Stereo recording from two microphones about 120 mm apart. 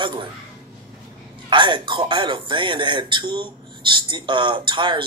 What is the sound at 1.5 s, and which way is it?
Speech, 40° right (ahead or behind).